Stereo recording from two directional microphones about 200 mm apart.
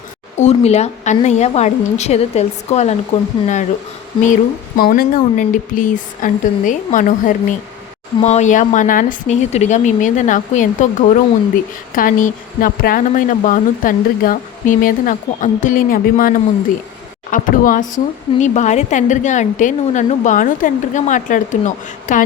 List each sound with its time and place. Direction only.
0.3 s speech: 35° left (ahead or behind)
4.8 s speech: 45° left (ahead or behind)